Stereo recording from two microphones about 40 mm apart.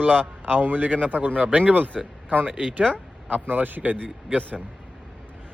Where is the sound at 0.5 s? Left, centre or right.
Right.